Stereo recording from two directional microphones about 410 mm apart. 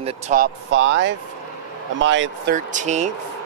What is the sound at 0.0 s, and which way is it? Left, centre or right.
Speech, centre.